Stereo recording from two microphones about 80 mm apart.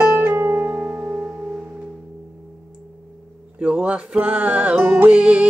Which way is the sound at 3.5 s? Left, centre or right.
Centre.